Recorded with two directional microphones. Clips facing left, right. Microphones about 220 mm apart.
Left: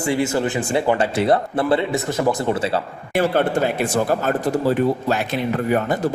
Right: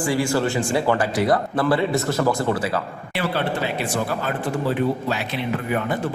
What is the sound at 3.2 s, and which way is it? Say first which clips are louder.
Speech: left 6 dB; 45° left (ahead or behind).